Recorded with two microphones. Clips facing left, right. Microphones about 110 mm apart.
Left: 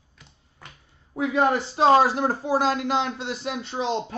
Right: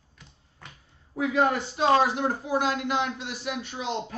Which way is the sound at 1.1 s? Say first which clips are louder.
Left 2 dB; 25° left (ahead or behind).